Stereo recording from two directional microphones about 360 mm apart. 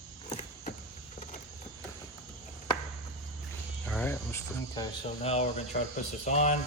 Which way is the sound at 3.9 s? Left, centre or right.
Centre.